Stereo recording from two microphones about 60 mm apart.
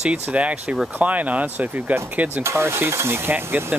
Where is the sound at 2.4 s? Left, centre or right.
Right.